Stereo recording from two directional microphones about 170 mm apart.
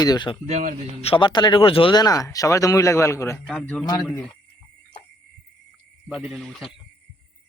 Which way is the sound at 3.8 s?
25° left (ahead or behind).